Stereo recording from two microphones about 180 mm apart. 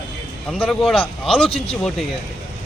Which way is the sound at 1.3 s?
30° left (ahead or behind).